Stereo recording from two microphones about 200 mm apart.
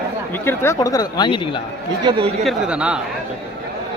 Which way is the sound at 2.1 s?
25° right (ahead or behind).